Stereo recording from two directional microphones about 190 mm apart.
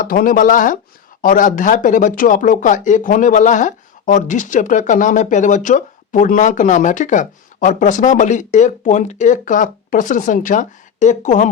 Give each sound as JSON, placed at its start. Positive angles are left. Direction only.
{"t": 0.0, "sound": "speech", "side_deg": 45}